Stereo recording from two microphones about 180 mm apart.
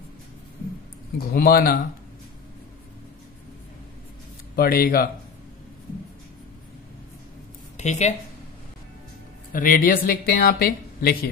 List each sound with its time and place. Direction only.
1.1 s speech: 55° left (ahead or behind)
4.6 s speech: 55° left (ahead or behind)
7.7 s a woman's voice: 40° left (ahead or behind)
9.5 s speech: 50° left (ahead or behind)